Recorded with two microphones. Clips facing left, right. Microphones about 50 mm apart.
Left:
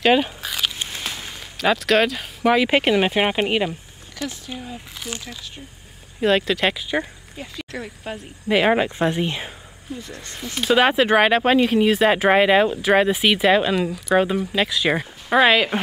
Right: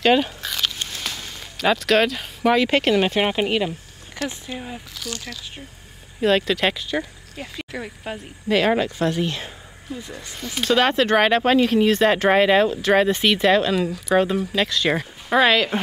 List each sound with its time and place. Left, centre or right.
0.0 s a sound: centre
1.6 s speech: centre
4.9 s speech: left
6.2 s speech: centre
8.5 s speech: centre
10.3 s speech: centre